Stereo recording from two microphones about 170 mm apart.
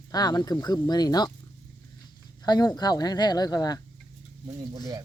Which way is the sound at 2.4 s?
25° left (ahead or behind).